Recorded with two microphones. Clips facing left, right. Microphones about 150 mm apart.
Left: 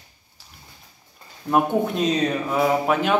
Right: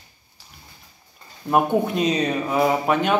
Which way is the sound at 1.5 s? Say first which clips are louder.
Right 1 dB; 5° right (ahead or behind).